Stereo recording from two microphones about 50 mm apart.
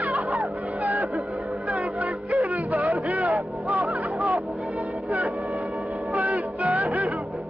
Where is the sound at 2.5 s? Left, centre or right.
Right.